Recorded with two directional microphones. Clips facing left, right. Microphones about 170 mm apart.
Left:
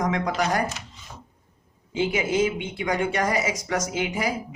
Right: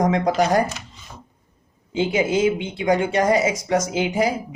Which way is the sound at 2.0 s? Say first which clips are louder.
Right 3 dB; 30° right (ahead or behind).